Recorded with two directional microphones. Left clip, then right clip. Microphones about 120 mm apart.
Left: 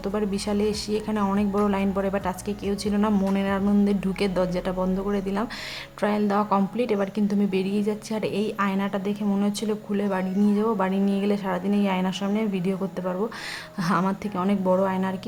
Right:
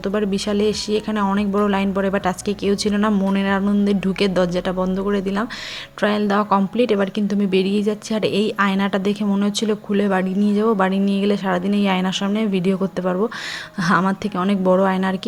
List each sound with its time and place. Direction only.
0.0 s speech: 25° right (ahead or behind)